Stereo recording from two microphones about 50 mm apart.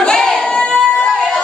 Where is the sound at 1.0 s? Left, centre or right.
Centre.